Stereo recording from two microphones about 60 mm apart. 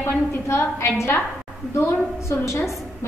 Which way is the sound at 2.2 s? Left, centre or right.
Left.